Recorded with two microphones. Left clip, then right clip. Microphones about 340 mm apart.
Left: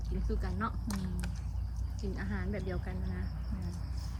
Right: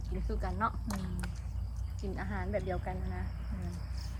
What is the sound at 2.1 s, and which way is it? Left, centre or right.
Speech, centre.